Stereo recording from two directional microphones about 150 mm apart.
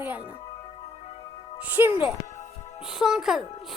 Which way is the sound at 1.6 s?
10° right (ahead or behind).